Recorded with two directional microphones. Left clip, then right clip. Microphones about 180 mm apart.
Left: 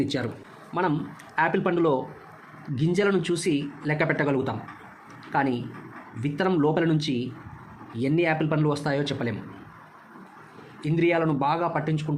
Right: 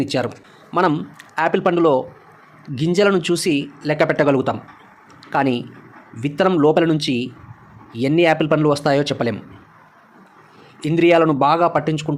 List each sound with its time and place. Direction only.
0.1 s speech: 35° right (ahead or behind)
10.8 s speech: 30° right (ahead or behind)